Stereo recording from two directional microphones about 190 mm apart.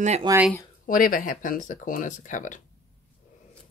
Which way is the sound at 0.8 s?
45° left (ahead or behind).